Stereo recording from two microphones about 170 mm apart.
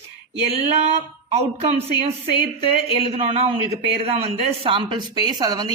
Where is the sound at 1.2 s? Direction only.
35° right (ahead or behind).